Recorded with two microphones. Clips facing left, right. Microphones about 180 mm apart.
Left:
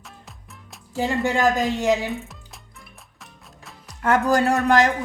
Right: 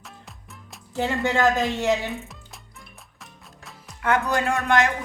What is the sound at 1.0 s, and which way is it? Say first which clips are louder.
Speech: left 1 dB; 15° left (ahead or behind).